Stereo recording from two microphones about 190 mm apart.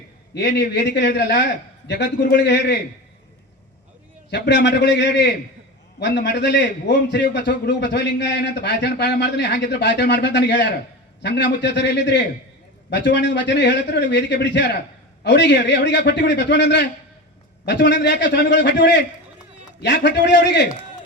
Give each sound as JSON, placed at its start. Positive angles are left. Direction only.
{"t": 0.3, "sound": "a man's voice", "side_deg": 65}
{"t": 4.3, "sound": "a man's voice", "side_deg": 65}